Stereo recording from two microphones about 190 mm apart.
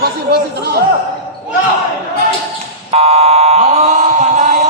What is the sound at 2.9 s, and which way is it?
Buzzer, 35° right (ahead or behind).